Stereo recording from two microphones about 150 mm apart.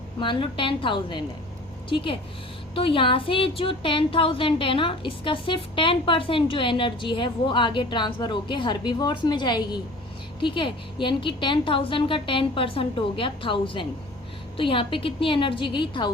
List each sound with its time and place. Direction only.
0.2 s speech: 35° left (ahead or behind)